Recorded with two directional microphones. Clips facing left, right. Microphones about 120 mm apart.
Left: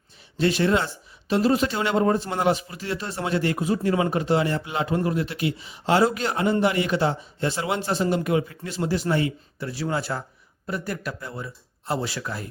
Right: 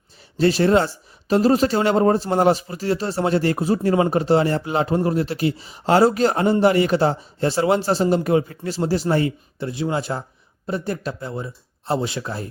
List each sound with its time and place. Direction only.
0.3 s a man's voice: 35° right (ahead or behind)
9.6 s speech: 20° right (ahead or behind)